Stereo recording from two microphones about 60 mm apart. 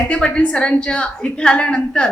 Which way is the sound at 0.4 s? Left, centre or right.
Centre.